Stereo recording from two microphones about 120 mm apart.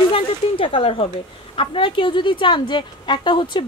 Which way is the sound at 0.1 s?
45° left (ahead or behind).